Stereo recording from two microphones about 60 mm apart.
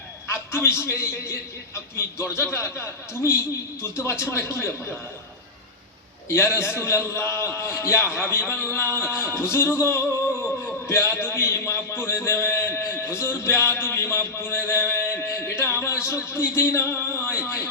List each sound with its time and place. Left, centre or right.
0.5 s a man's voice: left
6.3 s a man's voice: left
14.7 s a sound: left
16.6 s a man's voice: left